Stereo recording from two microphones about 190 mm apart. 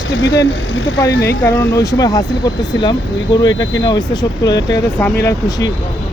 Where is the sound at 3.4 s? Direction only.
75° left (ahead or behind).